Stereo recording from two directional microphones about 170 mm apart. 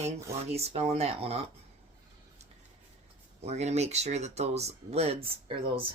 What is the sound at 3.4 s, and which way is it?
Speech, 40° right (ahead or behind).